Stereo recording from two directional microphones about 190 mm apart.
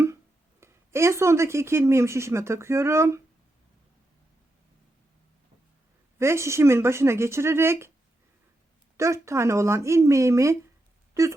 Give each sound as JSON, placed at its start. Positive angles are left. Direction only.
{"t": 0.6, "sound": "speech", "side_deg": -15}
{"t": 6.1, "sound": "speech", "side_deg": -15}
{"t": 9.0, "sound": "speech", "side_deg": -15}
{"t": 11.1, "sound": "wail", "side_deg": -15}